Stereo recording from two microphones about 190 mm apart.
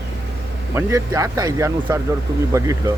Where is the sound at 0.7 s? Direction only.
15° right (ahead or behind).